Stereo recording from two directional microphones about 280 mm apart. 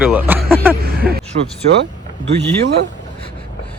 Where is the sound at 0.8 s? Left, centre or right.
Right.